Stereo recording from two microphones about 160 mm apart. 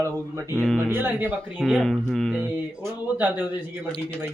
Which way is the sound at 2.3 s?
10° right (ahead or behind).